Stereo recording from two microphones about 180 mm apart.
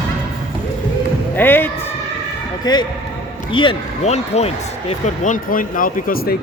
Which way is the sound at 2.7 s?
25° left (ahead or behind).